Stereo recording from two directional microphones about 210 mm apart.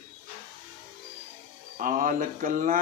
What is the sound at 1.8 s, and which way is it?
Speech, 40° right (ahead or behind).